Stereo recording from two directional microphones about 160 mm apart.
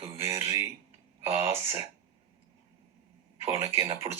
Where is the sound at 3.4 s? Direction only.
15° right (ahead or behind).